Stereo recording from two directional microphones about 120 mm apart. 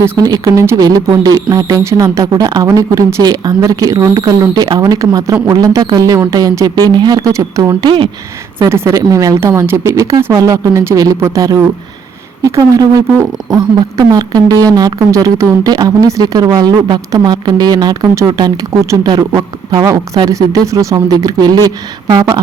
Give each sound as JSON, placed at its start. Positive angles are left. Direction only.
{"t": 0.0, "sound": "speech", "side_deg": -30}
{"t": 8.5, "sound": "speech", "side_deg": -20}